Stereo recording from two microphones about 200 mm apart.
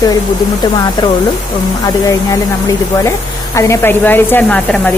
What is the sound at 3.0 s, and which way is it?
Speech, 15° left (ahead or behind).